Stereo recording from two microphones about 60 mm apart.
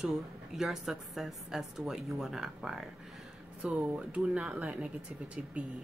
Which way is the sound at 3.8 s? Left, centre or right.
Centre.